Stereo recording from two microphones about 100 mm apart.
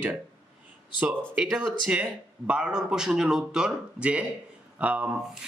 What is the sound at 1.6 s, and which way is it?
Speech, 10° right (ahead or behind).